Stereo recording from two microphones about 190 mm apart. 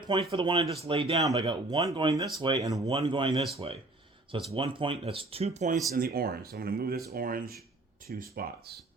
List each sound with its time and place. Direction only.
0.0 s speech: 25° right (ahead or behind)
2.9 s speech: 30° right (ahead or behind)
4.5 s speech: 25° right (ahead or behind)
5.9 s speech: 55° right (ahead or behind)